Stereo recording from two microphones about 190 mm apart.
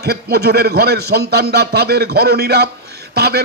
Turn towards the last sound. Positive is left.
turn(degrees=-55)  # may be behind; listen again after turning